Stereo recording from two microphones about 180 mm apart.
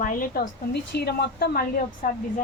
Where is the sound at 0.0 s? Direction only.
50° left (ahead or behind).